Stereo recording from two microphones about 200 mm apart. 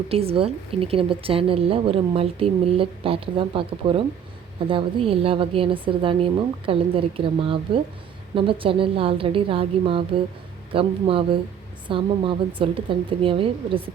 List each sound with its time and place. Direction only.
0.1 s a woman's voice: 30° right (ahead or behind)